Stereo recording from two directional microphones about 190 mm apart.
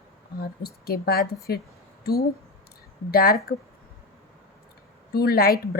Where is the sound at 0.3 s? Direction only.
55° left (ahead or behind).